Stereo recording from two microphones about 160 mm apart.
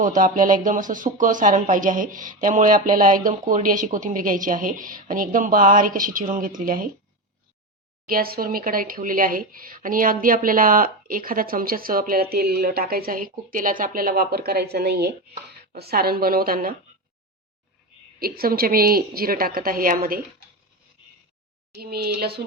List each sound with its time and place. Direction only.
0.0 s speech: 55° right (ahead or behind)
8.0 s speech: 65° right (ahead or behind); by 15.1 s 90° right
15.7 s a woman's voice: 75° right (ahead or behind)
18.2 s a woman's voice: 70° right (ahead or behind)
21.8 s a woman's voice: 75° right (ahead or behind)